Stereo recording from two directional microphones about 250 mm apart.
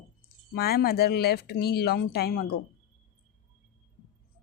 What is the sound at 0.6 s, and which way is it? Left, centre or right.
A woman's voice, left.